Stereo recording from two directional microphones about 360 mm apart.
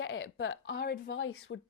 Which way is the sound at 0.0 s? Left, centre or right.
Left.